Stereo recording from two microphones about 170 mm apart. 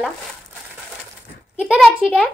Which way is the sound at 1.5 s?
5° right (ahead or behind).